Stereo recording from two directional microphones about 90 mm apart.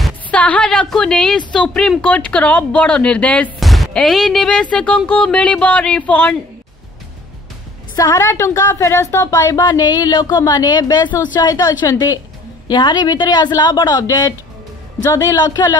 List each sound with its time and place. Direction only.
0.3 s speech: 15° left (ahead or behind)
3.5 s speech: centre (ahead or behind)
7.9 s a woman's voice: 35° left (ahead or behind)
9.7 s a woman's voice: 45° left (ahead or behind)
12.6 s a woman's voice: 50° left (ahead or behind)